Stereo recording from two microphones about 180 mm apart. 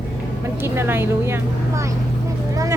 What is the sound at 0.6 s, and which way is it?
Speech, 15° right (ahead or behind).